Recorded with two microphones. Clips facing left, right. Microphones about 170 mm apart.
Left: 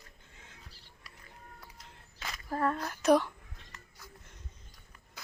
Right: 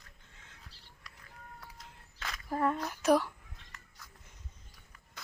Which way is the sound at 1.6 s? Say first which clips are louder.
Right 1 dB; centre (ahead or behind).